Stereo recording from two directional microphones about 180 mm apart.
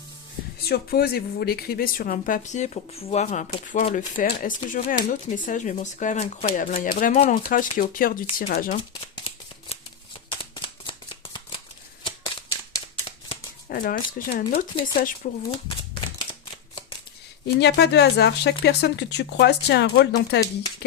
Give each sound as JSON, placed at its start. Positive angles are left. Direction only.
{"t": 0.6, "sound": "speech", "side_deg": 60}
{"t": 7.1, "sound": "speech", "side_deg": 35}
{"t": 7.4, "sound": "speech", "side_deg": 50}
{"t": 8.9, "sound": "shuffling cards", "side_deg": 30}
{"t": 12.2, "sound": "typewriter", "side_deg": 20}
{"t": 13.1, "sound": "shuffling cards", "side_deg": 30}
{"t": 13.7, "sound": "speech", "side_deg": 50}
{"t": 17.4, "sound": "speech", "side_deg": 70}